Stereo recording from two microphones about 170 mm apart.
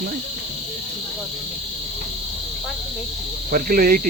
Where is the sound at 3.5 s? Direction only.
55° right (ahead or behind).